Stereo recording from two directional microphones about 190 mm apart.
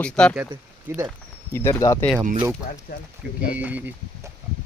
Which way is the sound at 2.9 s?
50° left (ahead or behind).